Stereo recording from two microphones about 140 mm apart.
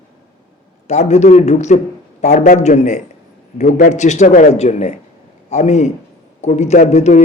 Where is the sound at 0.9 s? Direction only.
55° left (ahead or behind).